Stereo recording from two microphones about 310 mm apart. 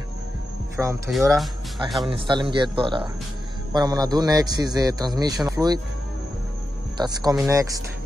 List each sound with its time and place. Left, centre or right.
0.7 s speech: centre
2.0 s a man's voice: centre
5.6 s speech: centre
7.0 s a man's voice: centre